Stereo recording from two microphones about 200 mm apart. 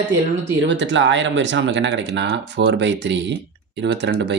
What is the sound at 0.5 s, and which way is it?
Speech, 65° right (ahead or behind).